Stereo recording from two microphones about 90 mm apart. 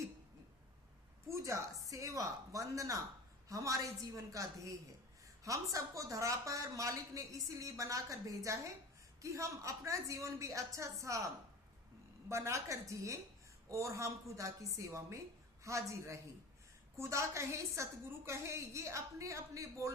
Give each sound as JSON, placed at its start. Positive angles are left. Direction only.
{"t": 1.3, "sound": "a sound", "side_deg": -35}
{"t": 1.9, "sound": "a woman's voice", "side_deg": -40}
{"t": 12.3, "sound": "a woman's voice", "side_deg": -35}